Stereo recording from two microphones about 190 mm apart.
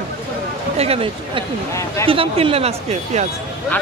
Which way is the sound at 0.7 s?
30° right (ahead or behind).